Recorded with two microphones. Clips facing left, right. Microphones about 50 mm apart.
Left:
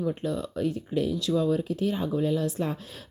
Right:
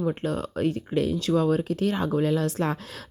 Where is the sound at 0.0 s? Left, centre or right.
Right.